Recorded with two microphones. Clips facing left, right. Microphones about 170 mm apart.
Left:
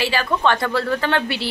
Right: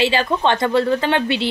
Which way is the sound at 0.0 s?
20° right (ahead or behind).